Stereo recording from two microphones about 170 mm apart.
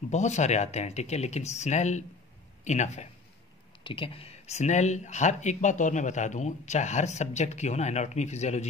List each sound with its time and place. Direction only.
0.1 s speech: 40° left (ahead or behind)
3.8 s speech: 30° left (ahead or behind)